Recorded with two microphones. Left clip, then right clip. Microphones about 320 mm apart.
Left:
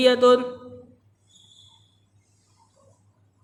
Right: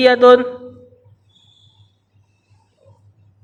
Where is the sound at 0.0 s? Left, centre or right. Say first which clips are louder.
Right 7 dB; centre.